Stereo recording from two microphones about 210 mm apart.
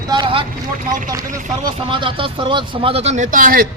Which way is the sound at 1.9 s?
25° right (ahead or behind).